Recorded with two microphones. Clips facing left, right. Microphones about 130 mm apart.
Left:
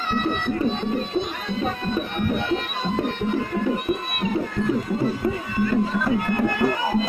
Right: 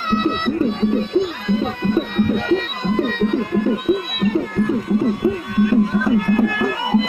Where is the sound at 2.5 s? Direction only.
70° right (ahead or behind).